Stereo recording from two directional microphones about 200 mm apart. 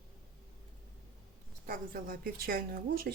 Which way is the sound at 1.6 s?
45° right (ahead or behind).